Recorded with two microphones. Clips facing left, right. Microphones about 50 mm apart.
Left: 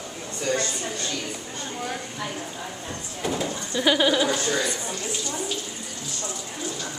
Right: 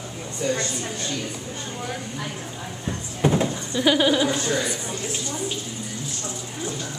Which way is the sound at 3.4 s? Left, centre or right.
Centre.